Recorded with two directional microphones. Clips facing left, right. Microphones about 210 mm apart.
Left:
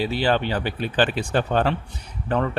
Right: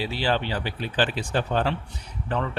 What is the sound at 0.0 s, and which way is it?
Speech, 55° left (ahead or behind).